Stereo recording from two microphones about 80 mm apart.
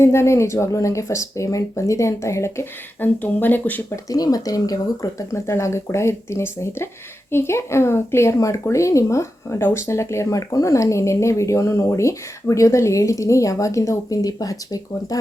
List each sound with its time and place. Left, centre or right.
0.0 s speech: left
3.0 s speech: left
3.9 s speech: left
5.3 s speech: left